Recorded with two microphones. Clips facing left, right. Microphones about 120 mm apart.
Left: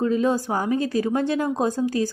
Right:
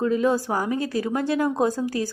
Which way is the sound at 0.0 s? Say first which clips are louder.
Even; 25° left (ahead or behind).